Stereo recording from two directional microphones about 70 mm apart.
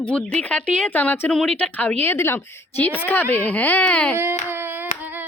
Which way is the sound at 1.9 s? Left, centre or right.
Left.